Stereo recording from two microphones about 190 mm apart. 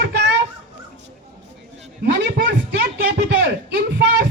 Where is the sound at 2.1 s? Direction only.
60° right (ahead or behind).